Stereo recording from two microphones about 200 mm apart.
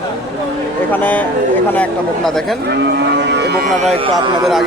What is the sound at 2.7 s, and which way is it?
Speech, 60° right (ahead or behind).